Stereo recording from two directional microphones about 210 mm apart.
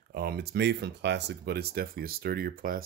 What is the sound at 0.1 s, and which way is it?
Speech, 50° right (ahead or behind).